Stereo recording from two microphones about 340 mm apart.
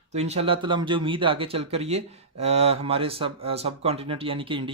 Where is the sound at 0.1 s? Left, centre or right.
Centre.